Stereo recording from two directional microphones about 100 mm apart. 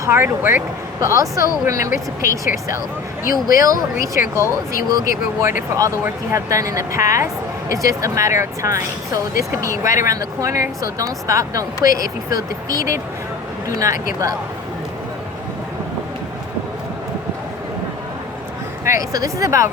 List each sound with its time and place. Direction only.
0.0 s speech: 25° right (ahead or behind)
1.0 s speech: 35° right (ahead or behind)
13.7 s speech: 35° right (ahead or behind)
18.9 s speech: 35° right (ahead or behind)